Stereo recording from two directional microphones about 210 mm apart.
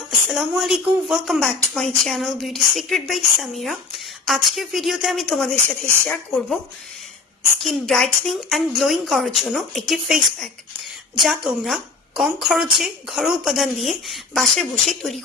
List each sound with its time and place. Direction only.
0.3 s a woman's voice: centre (ahead or behind)
7.6 s a woman's voice: centre (ahead or behind)
11.2 s a woman's voice: centre (ahead or behind)